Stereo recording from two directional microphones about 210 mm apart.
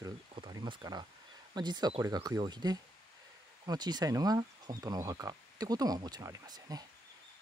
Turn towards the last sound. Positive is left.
turn(degrees=-20)  # may be behind; listen again after turning